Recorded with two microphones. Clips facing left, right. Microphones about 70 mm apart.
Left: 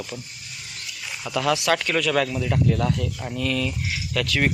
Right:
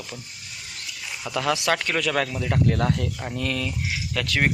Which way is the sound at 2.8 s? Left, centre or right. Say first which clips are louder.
Even; right.